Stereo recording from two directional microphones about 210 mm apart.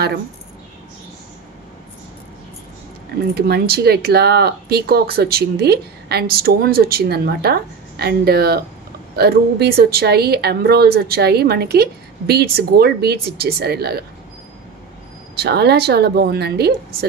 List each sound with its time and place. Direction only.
3.3 s speech: 50° right (ahead or behind)
15.3 s speech: 50° right (ahead or behind)